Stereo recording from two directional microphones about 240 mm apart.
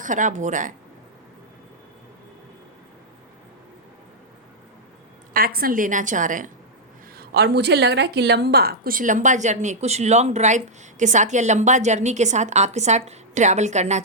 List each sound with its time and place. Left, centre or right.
0.0 s a woman's voice: right
5.3 s a woman's voice: right
7.2 s a woman's voice: right